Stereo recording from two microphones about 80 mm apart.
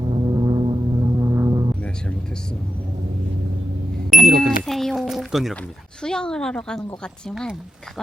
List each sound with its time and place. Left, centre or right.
0.0 s music: right
0.9 s music: right
4.1 s music: centre
6.0 s speech: centre